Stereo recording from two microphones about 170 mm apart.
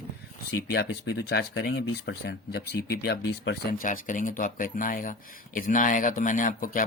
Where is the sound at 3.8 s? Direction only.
50° left (ahead or behind).